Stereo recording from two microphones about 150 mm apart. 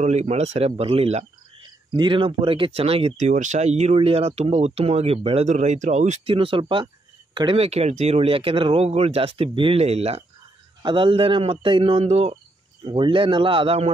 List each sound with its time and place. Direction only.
0.0 s speech: 45° right (ahead or behind)
1.6 s speech: 30° right (ahead or behind); by 6.3 s 50° right (ahead or behind)
6.3 s speech: 35° right (ahead or behind)
10.8 s speech: 35° right (ahead or behind)